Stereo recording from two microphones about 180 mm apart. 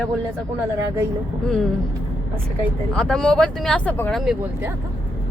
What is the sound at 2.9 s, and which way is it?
Speech, 5° left (ahead or behind).